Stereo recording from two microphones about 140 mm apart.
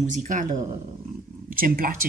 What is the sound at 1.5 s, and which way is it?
Speech, 80° right.